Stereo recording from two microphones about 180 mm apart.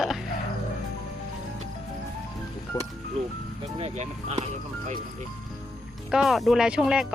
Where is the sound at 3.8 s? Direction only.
40° right (ahead or behind).